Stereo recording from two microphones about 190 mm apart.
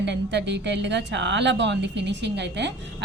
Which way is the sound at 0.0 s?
65° right (ahead or behind).